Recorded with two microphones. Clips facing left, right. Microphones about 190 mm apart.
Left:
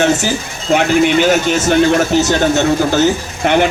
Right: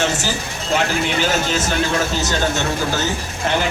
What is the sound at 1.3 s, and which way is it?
Speech, 65° left (ahead or behind).